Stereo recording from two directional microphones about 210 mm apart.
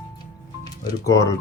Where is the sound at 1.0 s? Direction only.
15° left (ahead or behind).